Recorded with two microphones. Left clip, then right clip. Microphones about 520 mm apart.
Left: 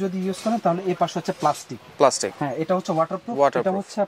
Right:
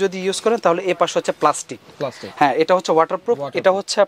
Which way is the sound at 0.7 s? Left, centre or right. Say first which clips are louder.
Right 2 dB; right.